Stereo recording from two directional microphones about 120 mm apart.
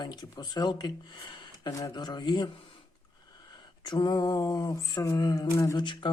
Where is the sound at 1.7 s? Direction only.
30° left (ahead or behind).